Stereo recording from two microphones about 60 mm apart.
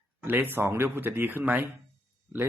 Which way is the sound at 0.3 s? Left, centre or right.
Right.